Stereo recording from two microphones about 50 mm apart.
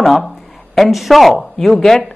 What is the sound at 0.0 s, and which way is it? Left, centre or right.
Speech, centre.